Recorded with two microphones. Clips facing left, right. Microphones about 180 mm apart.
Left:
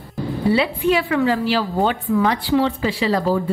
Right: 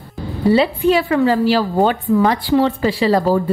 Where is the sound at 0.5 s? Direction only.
35° right (ahead or behind).